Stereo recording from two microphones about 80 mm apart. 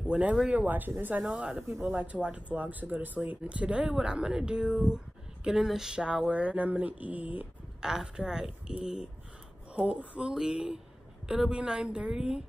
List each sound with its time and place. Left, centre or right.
0.0 s speech: centre
1.2 s speech: centre
7.8 s speech: centre